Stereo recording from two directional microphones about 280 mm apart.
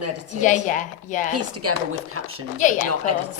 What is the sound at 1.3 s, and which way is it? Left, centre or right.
A man's voice, right.